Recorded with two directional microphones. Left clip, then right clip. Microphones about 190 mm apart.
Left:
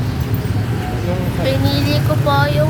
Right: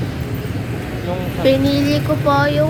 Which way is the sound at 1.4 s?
35° right (ahead or behind).